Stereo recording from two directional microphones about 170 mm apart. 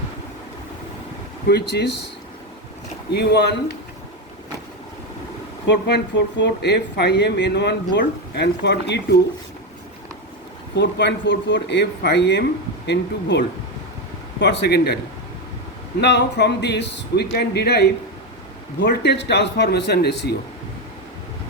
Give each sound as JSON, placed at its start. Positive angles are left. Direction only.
{"t": 1.5, "sound": "speech", "side_deg": 80}
{"t": 3.1, "sound": "a man's voice", "side_deg": 75}
{"t": 5.6, "sound": "speech", "side_deg": 85}
{"t": 10.8, "sound": "speech", "side_deg": 85}
{"t": 16.0, "sound": "speech", "side_deg": 90}
{"t": 18.8, "sound": "a man's voice", "side_deg": 80}